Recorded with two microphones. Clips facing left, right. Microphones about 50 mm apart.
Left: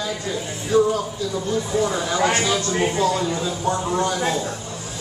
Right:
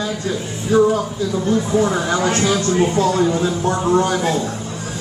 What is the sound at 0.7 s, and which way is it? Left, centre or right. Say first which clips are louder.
Speech: right 4 dB; right.